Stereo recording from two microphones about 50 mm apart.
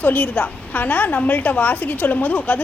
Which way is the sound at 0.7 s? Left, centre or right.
Left.